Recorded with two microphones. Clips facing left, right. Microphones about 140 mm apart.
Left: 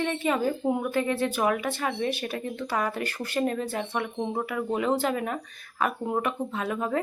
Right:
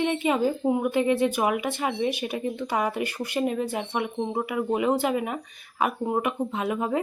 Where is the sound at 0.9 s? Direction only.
15° right (ahead or behind).